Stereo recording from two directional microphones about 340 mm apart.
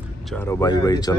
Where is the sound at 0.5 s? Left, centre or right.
Centre.